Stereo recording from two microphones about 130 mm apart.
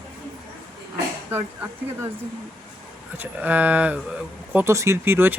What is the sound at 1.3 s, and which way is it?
Speech, 20° right (ahead or behind).